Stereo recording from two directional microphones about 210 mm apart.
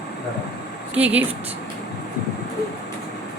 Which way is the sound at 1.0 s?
5° right (ahead or behind).